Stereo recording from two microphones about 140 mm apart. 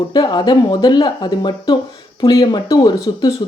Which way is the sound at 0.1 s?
30° left (ahead or behind).